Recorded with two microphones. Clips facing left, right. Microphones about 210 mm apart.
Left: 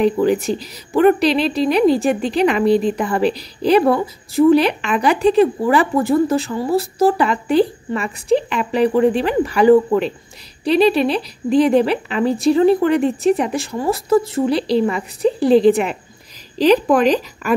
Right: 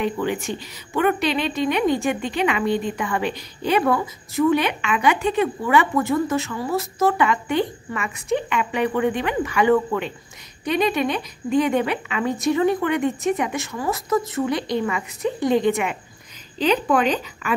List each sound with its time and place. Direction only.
0.0 s a woman's voice: 35° left (ahead or behind)